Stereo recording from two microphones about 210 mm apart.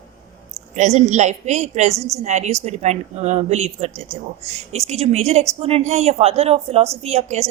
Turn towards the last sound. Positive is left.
turn(degrees=-30)  # may be behind; listen again after turning